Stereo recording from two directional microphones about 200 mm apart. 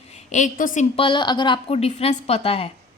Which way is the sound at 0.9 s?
25° left (ahead or behind).